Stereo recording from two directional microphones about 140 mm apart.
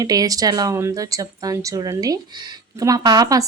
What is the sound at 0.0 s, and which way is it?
A woman's voice, 25° right (ahead or behind).